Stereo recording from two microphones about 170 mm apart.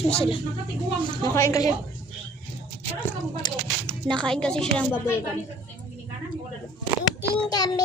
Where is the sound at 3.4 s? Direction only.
25° left (ahead or behind).